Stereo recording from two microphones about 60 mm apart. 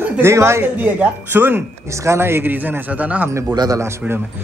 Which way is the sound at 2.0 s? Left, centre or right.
Right.